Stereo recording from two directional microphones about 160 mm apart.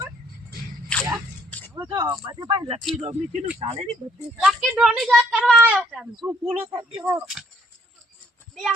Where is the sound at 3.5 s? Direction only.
40° right (ahead or behind).